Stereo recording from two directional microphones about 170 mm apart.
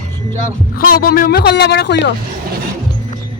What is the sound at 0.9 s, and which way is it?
Speech, 60° left (ahead or behind).